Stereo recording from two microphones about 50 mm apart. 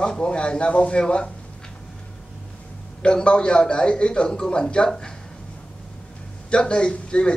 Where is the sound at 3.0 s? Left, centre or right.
Centre.